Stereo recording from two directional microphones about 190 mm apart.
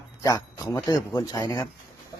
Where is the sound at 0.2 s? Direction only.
15° left (ahead or behind).